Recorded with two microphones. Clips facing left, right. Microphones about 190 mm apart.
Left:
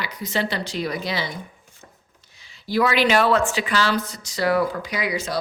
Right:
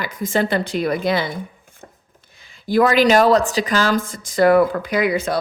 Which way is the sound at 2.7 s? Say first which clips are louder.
Right 5 dB; 45° right (ahead or behind).